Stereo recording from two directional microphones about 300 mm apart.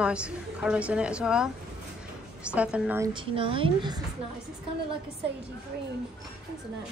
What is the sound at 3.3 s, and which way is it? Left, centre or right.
Speech, centre.